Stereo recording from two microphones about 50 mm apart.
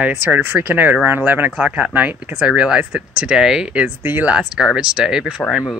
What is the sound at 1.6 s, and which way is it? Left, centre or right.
Speech, right.